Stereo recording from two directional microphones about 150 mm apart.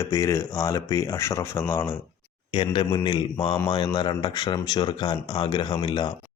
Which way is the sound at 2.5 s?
35° left (ahead or behind).